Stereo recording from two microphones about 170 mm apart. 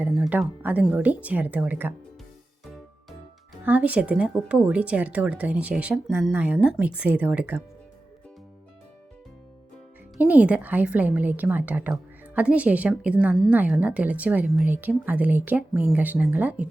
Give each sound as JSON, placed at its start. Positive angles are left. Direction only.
{"t": 0.0, "sound": "speech", "side_deg": -10}
{"t": 3.6, "sound": "speech", "side_deg": -10}
{"t": 10.2, "sound": "speech", "side_deg": -10}